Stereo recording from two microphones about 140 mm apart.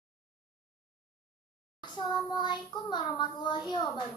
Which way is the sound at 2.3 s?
35° left (ahead or behind).